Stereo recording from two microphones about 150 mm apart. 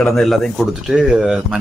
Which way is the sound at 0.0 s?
Centre (ahead or behind).